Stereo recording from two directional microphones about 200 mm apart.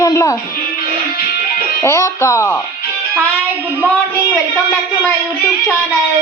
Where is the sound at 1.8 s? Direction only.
15° left (ahead or behind).